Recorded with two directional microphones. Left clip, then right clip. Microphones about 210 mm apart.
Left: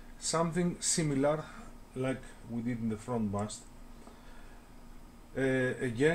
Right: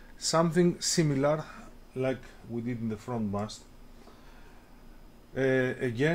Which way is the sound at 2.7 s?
40° right (ahead or behind).